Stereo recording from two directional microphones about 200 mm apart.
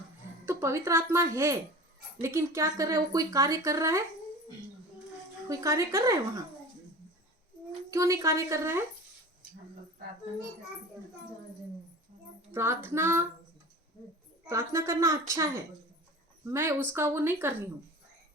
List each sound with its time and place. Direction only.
0.4 s speech: 15° right (ahead or behind)
5.5 s speech: 15° right (ahead or behind)
7.9 s speech: 15° right (ahead or behind)
12.5 s speech: 10° right (ahead or behind)
14.4 s speech: 15° right (ahead or behind)